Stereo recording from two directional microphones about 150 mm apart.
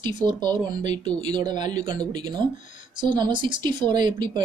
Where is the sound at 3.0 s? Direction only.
30° right (ahead or behind).